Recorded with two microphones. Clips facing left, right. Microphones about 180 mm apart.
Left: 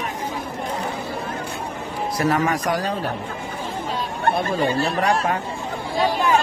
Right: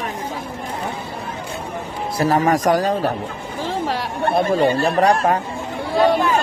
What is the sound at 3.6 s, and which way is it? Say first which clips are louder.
Chatter: right 6 dB; 80° right.